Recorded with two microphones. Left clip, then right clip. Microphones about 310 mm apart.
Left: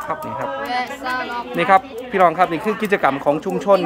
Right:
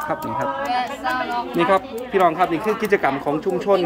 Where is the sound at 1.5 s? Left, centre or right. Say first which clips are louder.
Left 4 dB; centre.